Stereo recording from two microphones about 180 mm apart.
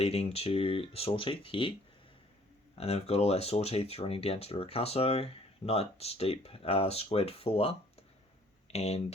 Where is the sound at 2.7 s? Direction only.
35° left (ahead or behind).